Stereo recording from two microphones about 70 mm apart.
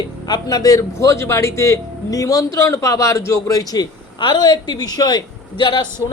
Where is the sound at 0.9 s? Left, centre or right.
Left.